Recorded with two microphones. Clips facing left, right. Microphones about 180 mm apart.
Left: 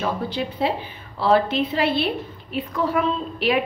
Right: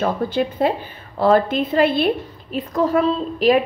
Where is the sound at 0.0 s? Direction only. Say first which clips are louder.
Right 5 dB; 50° right (ahead or behind).